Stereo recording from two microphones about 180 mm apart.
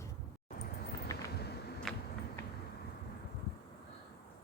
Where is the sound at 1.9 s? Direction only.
Centre (ahead or behind).